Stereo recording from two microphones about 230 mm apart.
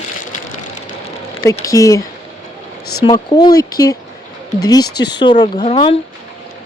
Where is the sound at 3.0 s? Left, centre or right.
Centre.